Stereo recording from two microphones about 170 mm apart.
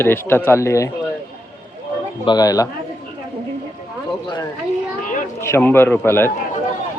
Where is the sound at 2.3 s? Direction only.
20° left (ahead or behind).